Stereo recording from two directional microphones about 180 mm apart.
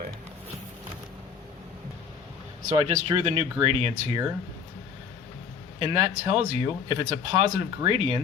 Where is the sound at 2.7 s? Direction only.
35° right (ahead or behind).